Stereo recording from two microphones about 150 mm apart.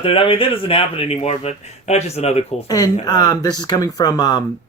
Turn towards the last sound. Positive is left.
turn(degrees=25)  # may be behind; listen again after turning